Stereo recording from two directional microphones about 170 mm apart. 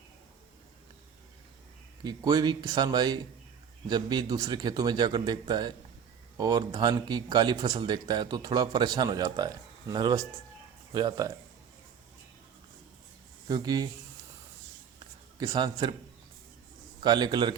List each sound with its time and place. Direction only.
2.0 s speech: 25° right (ahead or behind)
13.5 s speech: 25° right (ahead or behind)
14.9 s a sound: 25° right (ahead or behind)
17.0 s speech: 25° right (ahead or behind)